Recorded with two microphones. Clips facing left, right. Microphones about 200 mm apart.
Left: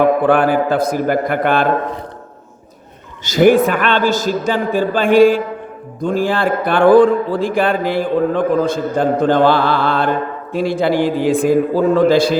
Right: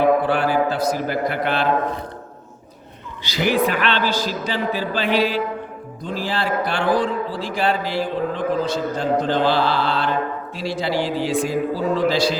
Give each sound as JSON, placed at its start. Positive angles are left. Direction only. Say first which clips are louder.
{"t": 0.0, "sound": "speech", "louder": "left 5 dB", "side_deg": 55}
{"t": 3.2, "sound": "speech", "louder": "left 9 dB", "side_deg": 50}